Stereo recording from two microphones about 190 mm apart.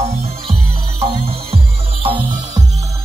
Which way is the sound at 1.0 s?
30° right (ahead or behind).